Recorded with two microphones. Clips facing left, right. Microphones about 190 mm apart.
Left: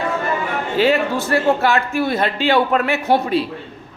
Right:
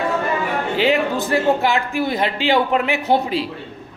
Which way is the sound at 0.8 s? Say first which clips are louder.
Left 2 dB; 15° right (ahead or behind).